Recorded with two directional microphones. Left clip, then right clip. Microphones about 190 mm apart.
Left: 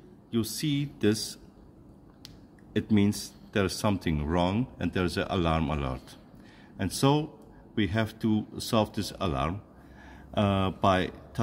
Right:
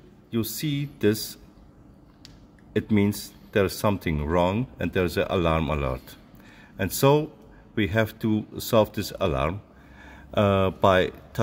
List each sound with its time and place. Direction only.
0.3 s speech: 30° right (ahead or behind)
2.7 s speech: 25° right (ahead or behind)